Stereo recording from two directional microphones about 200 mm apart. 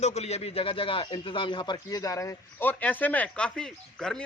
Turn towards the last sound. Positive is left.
turn(degrees=5)  # may be behind; listen again after turning